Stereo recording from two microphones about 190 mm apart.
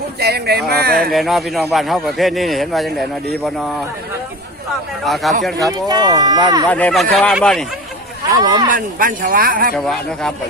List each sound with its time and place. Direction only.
0.2 s speech: 55° right (ahead or behind)
1.1 s a man's voice: centre (ahead or behind)
5.0 s a man's voice: centre (ahead or behind)
5.6 s speech: 20° right (ahead or behind)
6.7 s a man's voice: 10° left (ahead or behind)
8.3 s speech: 20° right (ahead or behind)
8.7 s speech: 50° right (ahead or behind)
9.7 s a man's voice: centre (ahead or behind)